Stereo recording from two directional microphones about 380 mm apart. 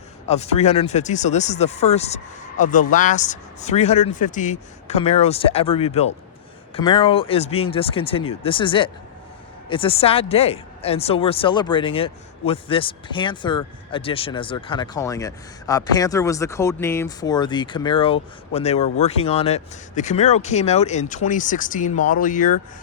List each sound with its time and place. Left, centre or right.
0.3 s speech: centre